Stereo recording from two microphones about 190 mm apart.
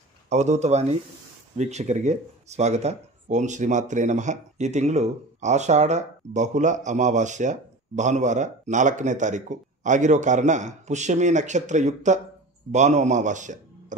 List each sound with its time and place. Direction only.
0.3 s a man's voice: 35° right (ahead or behind)